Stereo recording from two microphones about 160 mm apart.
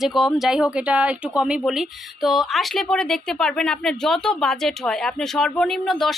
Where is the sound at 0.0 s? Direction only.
Centre (ahead or behind).